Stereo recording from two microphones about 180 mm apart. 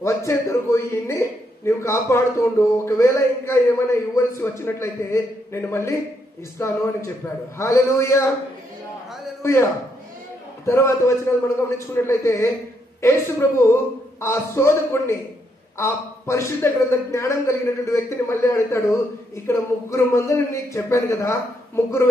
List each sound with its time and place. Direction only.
0.0 s speech: 15° left (ahead or behind)
9.4 s speech: 15° left (ahead or behind)